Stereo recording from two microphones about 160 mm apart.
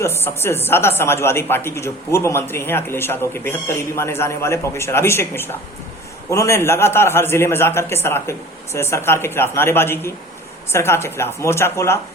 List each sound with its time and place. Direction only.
0.0 s speech: 15° left (ahead or behind)